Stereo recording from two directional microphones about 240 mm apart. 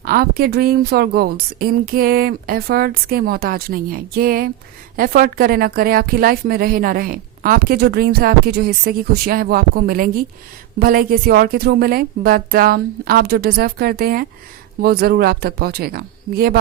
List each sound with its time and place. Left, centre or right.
0.0 s a woman's voice: right